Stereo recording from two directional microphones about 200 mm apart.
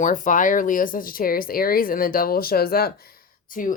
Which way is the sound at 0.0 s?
40° left (ahead or behind).